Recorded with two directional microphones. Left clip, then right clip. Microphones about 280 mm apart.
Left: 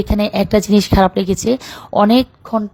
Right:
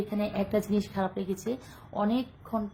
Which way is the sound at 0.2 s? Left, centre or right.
Left.